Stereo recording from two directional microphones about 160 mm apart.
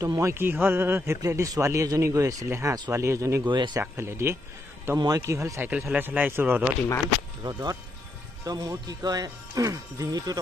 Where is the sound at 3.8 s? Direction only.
15° right (ahead or behind).